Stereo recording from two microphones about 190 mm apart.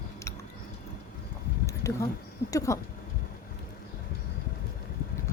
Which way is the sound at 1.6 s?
15° left (ahead or behind).